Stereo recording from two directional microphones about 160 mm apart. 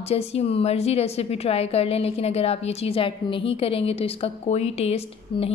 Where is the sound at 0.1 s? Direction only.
40° left (ahead or behind).